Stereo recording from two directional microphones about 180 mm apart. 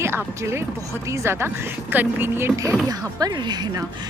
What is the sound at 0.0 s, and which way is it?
Speech, 15° right (ahead or behind).